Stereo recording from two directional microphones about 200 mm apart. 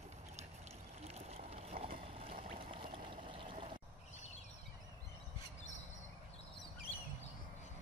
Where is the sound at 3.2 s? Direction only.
25° right (ahead or behind).